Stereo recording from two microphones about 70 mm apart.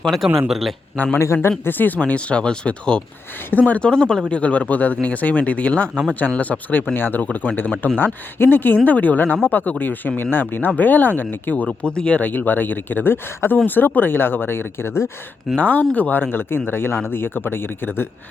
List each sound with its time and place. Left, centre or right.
0.0 s speech: centre
1.1 s speech: left
15.5 s speech: left